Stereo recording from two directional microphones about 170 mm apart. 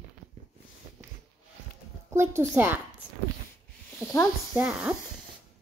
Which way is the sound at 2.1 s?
15° right (ahead or behind).